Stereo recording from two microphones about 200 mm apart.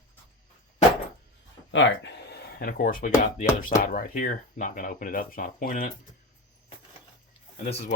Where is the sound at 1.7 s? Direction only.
65° left (ahead or behind); by 5.9 s 40° left (ahead or behind).